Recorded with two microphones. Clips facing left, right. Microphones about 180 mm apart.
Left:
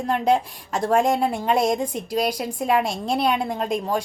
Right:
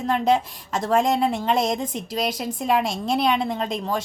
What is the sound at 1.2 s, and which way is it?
A woman's voice, 10° left (ahead or behind).